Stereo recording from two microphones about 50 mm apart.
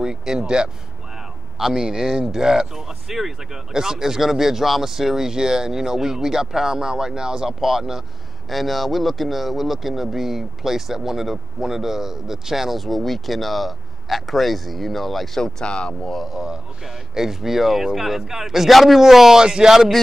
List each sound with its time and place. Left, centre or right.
0.0 s speech: centre
1.6 s speech: centre
15.6 s speech: centre
16.2 s speech: centre